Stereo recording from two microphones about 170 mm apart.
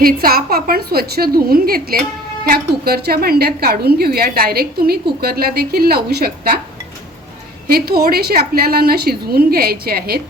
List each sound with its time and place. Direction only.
0.0 s a woman's voice: 60° right (ahead or behind)
7.7 s a woman's voice: 65° right (ahead or behind)